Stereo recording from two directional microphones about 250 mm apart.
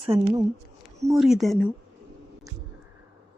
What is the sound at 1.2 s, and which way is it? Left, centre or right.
Speech, centre.